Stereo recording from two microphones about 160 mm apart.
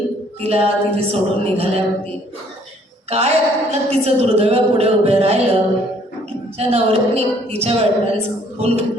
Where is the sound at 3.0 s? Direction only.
40° right (ahead or behind).